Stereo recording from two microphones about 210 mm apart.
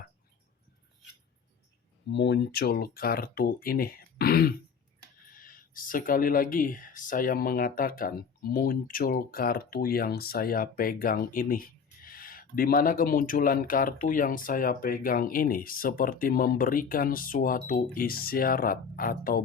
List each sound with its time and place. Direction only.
2.0 s speech: 55° left (ahead or behind)